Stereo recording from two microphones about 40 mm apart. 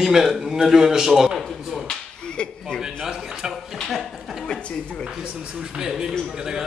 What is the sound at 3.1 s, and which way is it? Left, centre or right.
Speech, centre.